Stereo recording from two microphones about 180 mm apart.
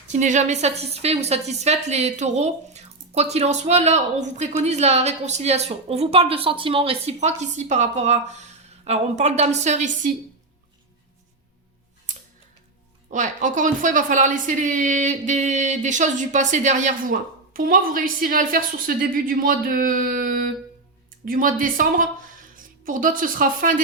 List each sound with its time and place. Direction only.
0.1 s a woman's voice: 40° right (ahead or behind)
13.1 s a woman's voice: 45° right (ahead or behind)